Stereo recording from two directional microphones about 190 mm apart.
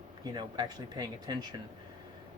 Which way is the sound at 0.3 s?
20° right (ahead or behind).